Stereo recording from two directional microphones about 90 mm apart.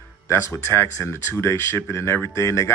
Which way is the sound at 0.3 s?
30° left (ahead or behind).